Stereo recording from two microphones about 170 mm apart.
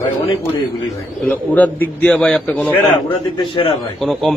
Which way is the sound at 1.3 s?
10° left (ahead or behind).